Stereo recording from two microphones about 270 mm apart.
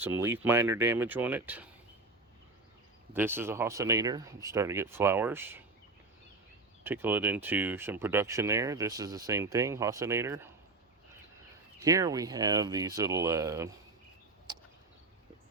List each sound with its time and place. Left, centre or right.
0.0 s speech: centre
3.1 s speech: centre
6.8 s speech: centre
11.8 s speech: centre
14.5 s a sound: centre